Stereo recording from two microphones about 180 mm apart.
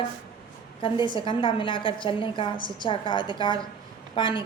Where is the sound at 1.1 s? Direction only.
25° left (ahead or behind).